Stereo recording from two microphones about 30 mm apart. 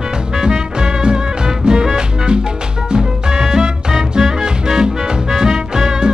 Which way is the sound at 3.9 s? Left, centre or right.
Centre.